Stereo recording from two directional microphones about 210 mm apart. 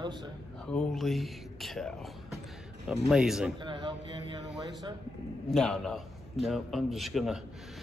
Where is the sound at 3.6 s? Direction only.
20° right (ahead or behind).